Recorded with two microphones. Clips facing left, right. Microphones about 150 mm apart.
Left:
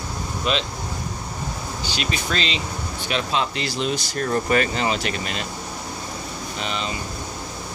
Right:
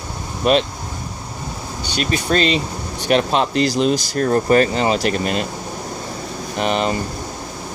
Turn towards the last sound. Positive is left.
turn(degrees=-55)  # may be behind; listen again after turning